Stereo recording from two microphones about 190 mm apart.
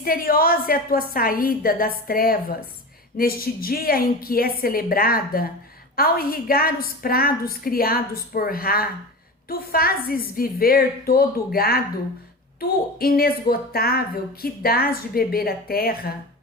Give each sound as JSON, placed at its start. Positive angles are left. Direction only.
{"t": 0.0, "sound": "a woman's voice", "side_deg": 50}